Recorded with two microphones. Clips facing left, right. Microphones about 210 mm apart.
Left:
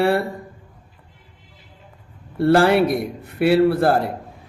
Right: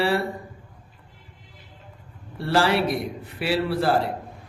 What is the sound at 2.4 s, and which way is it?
A man's voice, 55° left (ahead or behind).